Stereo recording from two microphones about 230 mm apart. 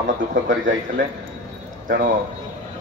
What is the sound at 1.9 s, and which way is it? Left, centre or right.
Speech, right.